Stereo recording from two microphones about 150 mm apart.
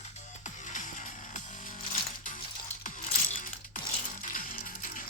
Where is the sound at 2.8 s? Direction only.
60° left (ahead or behind).